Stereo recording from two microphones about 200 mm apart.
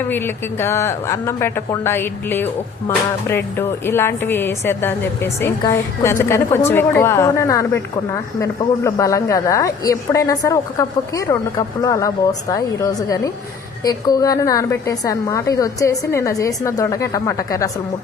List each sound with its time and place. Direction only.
0.1 s a woman's voice: 10° left (ahead or behind)